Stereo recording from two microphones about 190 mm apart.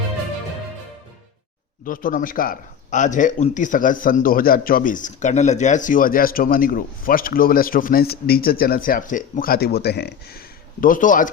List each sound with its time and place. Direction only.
1.8 s a man's voice: 45° left (ahead or behind)